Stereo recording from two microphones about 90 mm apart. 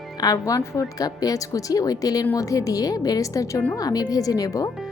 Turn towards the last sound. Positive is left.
turn(degrees=40)  # may be behind; listen again after turning